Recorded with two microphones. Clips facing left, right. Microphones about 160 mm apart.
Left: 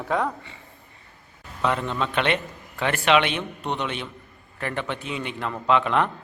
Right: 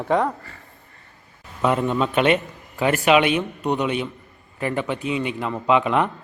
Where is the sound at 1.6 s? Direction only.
10° right (ahead or behind).